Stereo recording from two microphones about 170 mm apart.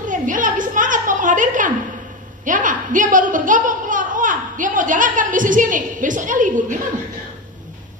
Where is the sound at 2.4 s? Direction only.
50° right (ahead or behind).